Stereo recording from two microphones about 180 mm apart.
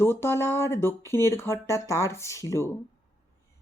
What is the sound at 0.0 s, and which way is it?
Speech, 15° left (ahead or behind).